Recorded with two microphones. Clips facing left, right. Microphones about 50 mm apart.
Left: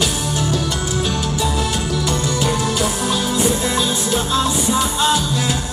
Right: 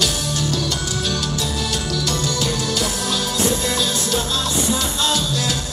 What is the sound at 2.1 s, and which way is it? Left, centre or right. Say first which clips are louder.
Music: left 3 dB; left.